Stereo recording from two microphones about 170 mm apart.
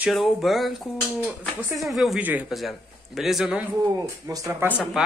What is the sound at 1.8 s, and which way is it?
Speech, centre (ahead or behind).